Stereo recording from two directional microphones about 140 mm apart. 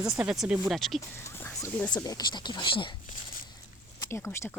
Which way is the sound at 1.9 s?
30° left (ahead or behind).